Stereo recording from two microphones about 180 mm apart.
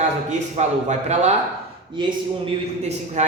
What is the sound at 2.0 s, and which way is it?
A man's voice, 30° right (ahead or behind).